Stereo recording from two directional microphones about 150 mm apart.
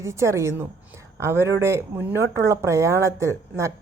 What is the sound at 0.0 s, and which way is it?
Speech, 20° right (ahead or behind).